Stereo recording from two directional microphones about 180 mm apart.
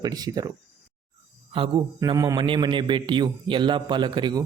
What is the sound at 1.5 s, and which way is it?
Speech, 30° right (ahead or behind).